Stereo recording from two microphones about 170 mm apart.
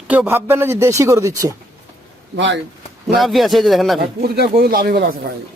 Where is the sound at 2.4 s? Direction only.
90° right.